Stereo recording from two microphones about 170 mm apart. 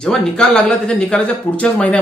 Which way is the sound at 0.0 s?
5° left (ahead or behind).